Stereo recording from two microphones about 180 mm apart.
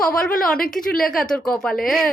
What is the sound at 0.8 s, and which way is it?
Speech, 5° left (ahead or behind).